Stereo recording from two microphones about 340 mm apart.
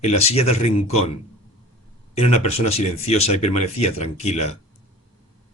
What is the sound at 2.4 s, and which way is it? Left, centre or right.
Speech, centre.